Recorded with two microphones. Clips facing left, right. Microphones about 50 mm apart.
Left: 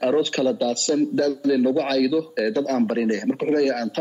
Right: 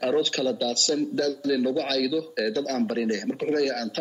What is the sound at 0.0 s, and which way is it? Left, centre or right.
A man's voice, left.